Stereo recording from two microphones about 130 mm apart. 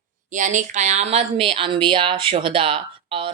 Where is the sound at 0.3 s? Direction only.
70° right (ahead or behind).